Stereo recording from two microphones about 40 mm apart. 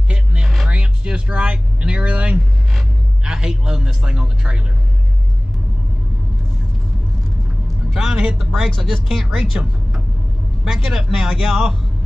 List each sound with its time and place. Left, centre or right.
0.1 s a sound: right
0.7 s speech: right
3.3 s a man's voice: centre
7.9 s a man's voice: right
8.6 s speech: centre
10.6 s speech: centre